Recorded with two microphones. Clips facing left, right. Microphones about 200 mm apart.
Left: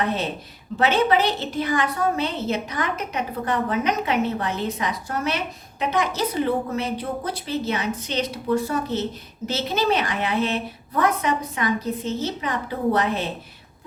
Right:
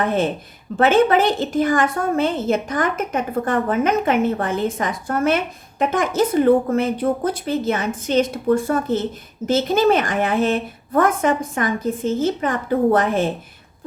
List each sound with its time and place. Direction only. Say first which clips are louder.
0.0 s a woman's voice: right 5 dB; 50° right (ahead or behind)